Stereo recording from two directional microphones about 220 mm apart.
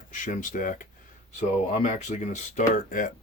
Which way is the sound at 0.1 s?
35° left (ahead or behind).